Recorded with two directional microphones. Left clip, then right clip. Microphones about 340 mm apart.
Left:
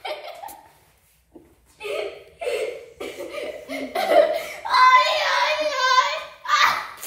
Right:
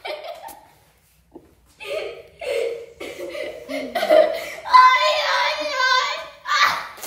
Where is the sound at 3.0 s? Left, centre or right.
Centre.